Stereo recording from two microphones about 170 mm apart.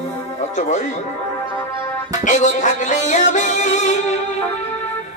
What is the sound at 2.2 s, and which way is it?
Music, 45° left (ahead or behind).